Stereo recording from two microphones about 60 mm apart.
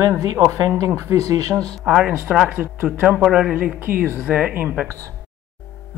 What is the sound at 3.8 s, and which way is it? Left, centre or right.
Speech, right.